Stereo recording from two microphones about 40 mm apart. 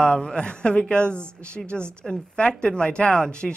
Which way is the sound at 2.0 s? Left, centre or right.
Centre.